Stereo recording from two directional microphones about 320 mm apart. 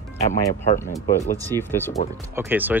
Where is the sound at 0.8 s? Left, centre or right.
Centre.